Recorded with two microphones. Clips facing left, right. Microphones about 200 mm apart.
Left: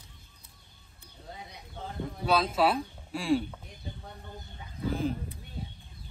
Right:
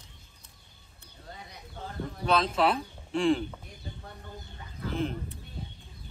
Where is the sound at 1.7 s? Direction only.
15° left (ahead or behind).